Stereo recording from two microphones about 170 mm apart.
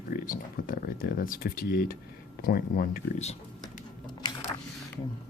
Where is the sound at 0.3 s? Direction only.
60° left (ahead or behind).